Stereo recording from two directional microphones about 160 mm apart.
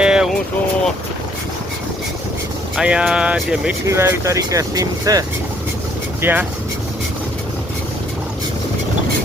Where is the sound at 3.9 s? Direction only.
15° right (ahead or behind).